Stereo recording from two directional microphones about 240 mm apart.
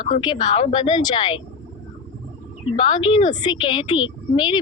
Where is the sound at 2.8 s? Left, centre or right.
Centre.